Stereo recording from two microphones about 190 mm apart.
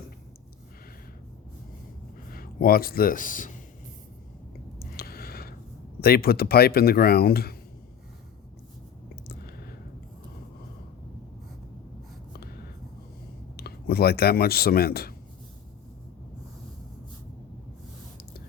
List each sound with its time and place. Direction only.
2.3 s speech: 50° left (ahead or behind)
4.8 s a sound: 50° left (ahead or behind)
6.0 s speech: 55° left (ahead or behind)
13.6 s speech: 55° left (ahead or behind)